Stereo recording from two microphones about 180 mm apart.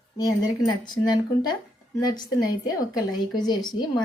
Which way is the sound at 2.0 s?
20° left (ahead or behind).